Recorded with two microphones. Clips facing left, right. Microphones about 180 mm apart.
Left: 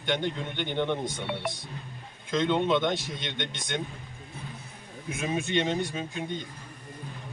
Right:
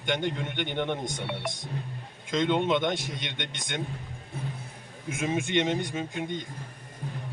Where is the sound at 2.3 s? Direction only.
20° right (ahead or behind).